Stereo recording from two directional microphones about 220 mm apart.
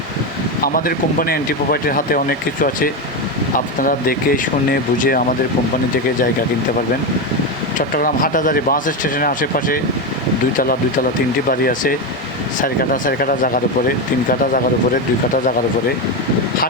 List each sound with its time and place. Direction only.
0.6 s speech: 40° left (ahead or behind)
7.8 s speech: 40° left (ahead or behind)
11.6 s speech: 40° left (ahead or behind)